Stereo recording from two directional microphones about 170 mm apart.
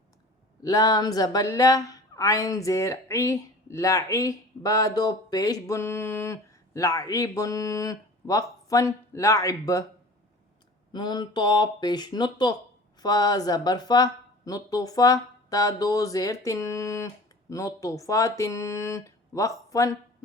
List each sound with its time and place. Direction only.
0.6 s speech: 20° left (ahead or behind)
10.9 s speech: 25° left (ahead or behind)